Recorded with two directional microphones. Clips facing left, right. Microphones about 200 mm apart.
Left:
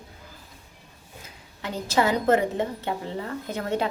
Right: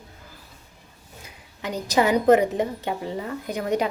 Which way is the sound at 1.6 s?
15° right (ahead or behind).